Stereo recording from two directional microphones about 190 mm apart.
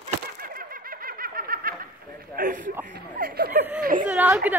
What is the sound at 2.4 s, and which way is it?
Speech, 50° right (ahead or behind).